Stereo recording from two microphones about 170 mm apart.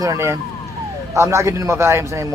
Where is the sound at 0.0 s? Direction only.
20° right (ahead or behind).